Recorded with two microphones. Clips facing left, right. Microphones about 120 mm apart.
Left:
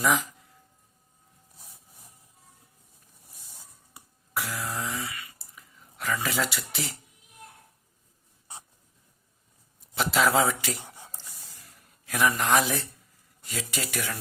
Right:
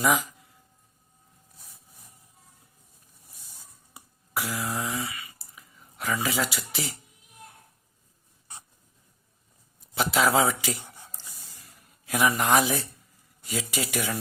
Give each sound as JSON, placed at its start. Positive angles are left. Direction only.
{"t": 3.9, "sound": "a sound", "side_deg": -5}
{"t": 9.9, "sound": "speech", "side_deg": 0}
{"t": 12.0, "sound": "speech", "side_deg": -10}